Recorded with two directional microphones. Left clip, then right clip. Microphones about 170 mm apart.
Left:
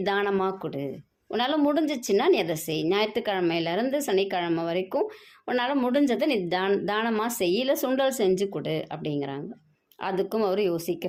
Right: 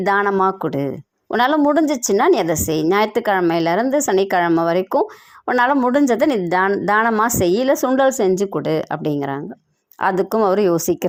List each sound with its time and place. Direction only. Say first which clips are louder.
0.0 s a woman's voice: right 9 dB; 35° right (ahead or behind)